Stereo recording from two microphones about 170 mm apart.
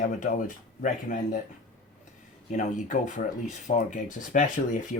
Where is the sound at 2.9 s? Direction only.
50° left (ahead or behind).